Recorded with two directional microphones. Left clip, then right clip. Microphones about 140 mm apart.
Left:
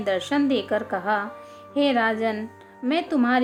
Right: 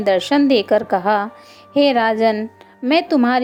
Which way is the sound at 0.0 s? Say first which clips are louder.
Right 8 dB; 45° right (ahead or behind).